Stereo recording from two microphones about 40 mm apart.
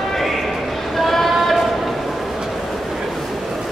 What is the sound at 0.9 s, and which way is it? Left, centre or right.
Vehicle, centre.